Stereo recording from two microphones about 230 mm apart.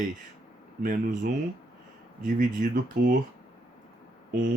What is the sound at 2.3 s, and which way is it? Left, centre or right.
Speech, right.